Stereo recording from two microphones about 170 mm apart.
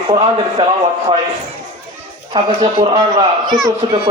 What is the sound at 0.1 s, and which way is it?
A man's voice, 35° right (ahead or behind).